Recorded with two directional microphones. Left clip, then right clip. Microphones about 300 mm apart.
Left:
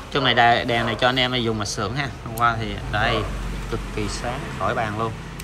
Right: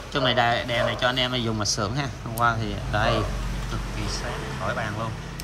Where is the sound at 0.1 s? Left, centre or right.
Centre.